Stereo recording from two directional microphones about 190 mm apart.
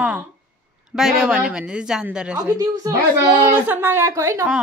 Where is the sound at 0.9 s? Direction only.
5° right (ahead or behind).